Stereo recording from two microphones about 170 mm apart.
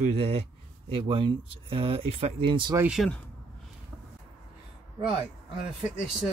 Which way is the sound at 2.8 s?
5° right (ahead or behind).